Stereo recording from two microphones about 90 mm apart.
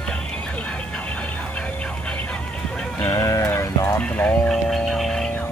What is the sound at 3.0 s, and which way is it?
Sheep, 35° left (ahead or behind).